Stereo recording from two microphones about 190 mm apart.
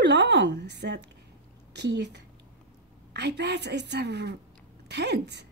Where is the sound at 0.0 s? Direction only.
65° right (ahead or behind).